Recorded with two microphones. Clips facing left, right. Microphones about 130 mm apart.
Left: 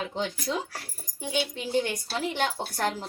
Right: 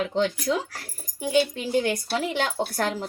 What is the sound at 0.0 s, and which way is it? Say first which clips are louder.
Speech: right 7 dB; 90° right.